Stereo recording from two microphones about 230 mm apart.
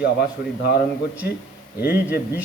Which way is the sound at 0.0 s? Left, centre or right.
Left.